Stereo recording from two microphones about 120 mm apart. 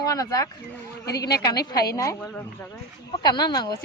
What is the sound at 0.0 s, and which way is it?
A woman's voice, 30° left (ahead or behind).